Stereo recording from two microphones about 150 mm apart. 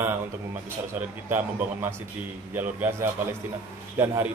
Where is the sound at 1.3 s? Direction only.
15° right (ahead or behind).